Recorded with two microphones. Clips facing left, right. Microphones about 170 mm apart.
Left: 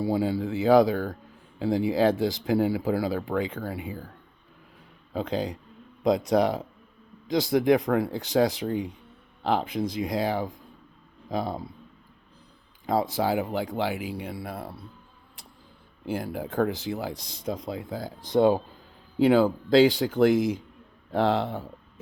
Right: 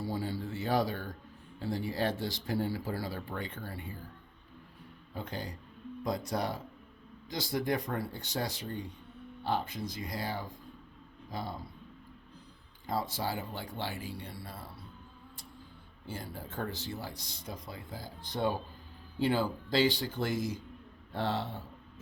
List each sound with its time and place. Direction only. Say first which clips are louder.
0.0 s speech: left 10 dB; 80° left
5.1 s speech: left 11 dB; 90° left
12.8 s speech: left 9 dB; 90° left
14.0 s speech: left 9 dB; 80° left; by 14.7 s 60° left (ahead or behind)
16.0 s speech: left 12 dB; 70° left (ahead or behind); by 21.5 s 90° left